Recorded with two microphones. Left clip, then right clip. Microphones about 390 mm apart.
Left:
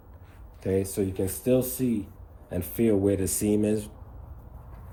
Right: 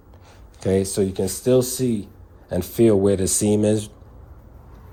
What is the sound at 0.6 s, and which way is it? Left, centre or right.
Speech, centre.